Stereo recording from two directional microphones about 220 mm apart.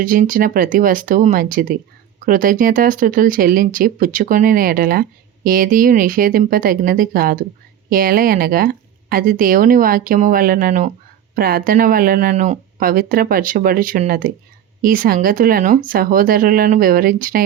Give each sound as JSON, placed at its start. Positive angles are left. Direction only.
{"t": 0.0, "sound": "speech", "side_deg": -40}